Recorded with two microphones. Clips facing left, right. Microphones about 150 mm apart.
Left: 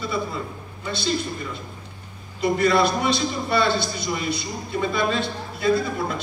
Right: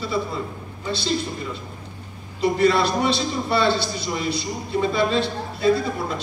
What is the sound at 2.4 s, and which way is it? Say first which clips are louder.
A man's voice: right 1 dB; 30° right (ahead or behind).